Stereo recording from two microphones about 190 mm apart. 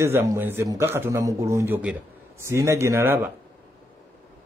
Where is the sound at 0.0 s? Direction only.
15° right (ahead or behind).